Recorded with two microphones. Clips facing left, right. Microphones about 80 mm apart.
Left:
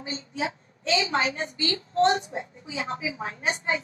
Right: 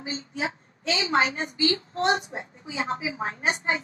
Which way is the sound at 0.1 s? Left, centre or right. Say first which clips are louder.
Even; right.